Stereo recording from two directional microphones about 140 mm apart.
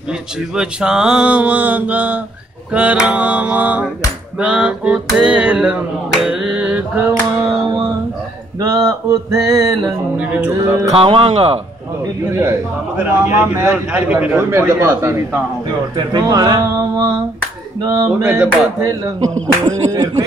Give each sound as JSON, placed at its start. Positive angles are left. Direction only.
{"t": 0.4, "sound": "a man's voice", "side_deg": -5}
{"t": 6.1, "sound": "mantra", "side_deg": -5}
{"t": 8.5, "sound": "a sound", "side_deg": -25}
{"t": 10.1, "sound": "a man's voice", "side_deg": -10}
{"t": 10.9, "sound": "speech", "side_deg": -40}
{"t": 12.4, "sound": "a man's voice", "side_deg": -15}
{"t": 18.2, "sound": "a man's voice", "side_deg": -10}
{"t": 18.9, "sound": "speech", "side_deg": -30}